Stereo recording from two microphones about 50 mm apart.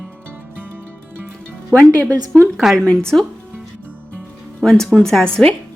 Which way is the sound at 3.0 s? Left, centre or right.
Centre.